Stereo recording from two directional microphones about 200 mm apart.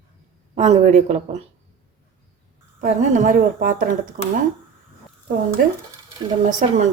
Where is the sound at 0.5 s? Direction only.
35° right (ahead or behind).